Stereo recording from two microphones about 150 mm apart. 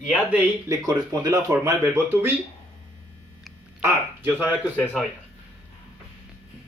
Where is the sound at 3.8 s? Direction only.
10° right (ahead or behind).